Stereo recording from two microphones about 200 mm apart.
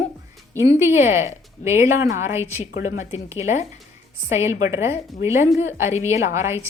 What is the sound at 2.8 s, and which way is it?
Speech, 35° left (ahead or behind).